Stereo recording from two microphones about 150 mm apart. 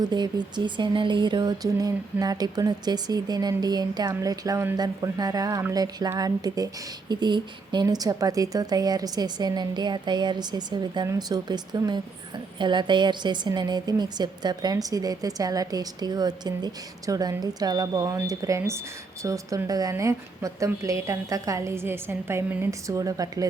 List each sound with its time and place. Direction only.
0.0 s speech: 30° right (ahead or behind)